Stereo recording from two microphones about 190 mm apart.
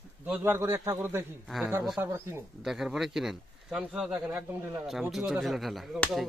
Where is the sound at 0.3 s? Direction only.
10° right (ahead or behind).